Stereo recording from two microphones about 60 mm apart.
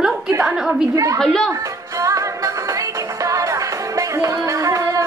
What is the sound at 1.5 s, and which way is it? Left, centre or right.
Music, right.